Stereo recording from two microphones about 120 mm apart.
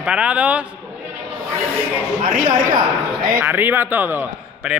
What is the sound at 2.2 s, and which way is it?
Speech, 90° right.